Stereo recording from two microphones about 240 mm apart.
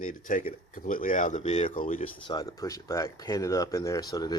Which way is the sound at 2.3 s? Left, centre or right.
Centre.